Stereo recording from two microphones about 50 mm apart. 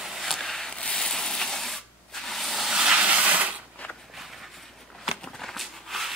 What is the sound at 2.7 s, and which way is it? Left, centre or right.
Vehicle, centre.